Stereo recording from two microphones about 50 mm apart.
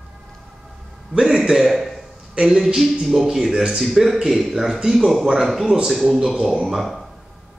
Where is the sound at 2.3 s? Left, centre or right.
Centre.